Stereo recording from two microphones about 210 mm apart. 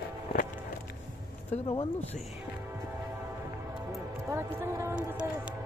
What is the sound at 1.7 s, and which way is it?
Speech, 30° left (ahead or behind).